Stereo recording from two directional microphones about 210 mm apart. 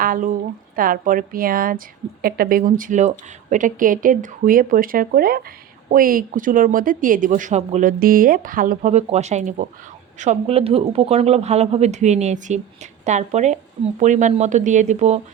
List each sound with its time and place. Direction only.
0.0 s a woman's voice: 40° right (ahead or behind)